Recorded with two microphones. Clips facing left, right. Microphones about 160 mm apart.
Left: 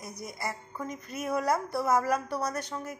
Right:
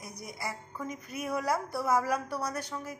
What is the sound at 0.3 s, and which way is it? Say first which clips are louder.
A woman's voice: left 1 dB; centre (ahead or behind).